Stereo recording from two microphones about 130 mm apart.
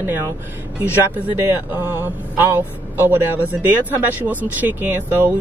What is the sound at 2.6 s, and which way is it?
Speech, 15° right (ahead or behind).